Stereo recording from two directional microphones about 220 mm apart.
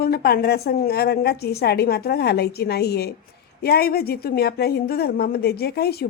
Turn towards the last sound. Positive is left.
turn(degrees=45)  # may be behind; listen again after turning